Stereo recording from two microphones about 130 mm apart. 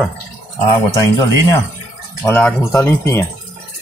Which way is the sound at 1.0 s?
25° left (ahead or behind).